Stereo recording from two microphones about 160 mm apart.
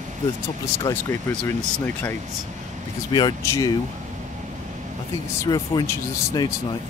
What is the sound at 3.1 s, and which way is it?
Speech, 20° left (ahead or behind).